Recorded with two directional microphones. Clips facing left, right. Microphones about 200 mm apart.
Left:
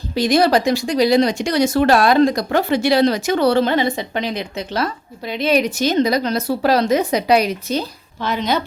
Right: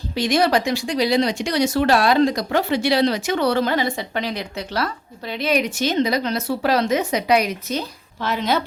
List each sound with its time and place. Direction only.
0.1 s speech: 35° left (ahead or behind); by 5.5 s 20° left (ahead or behind)
5.5 s speech: 35° left (ahead or behind)
8.2 s a woman's voice: 5° right (ahead or behind)